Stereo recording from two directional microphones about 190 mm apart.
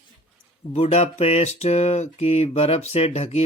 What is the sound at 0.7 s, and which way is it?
Mantra, 35° left (ahead or behind).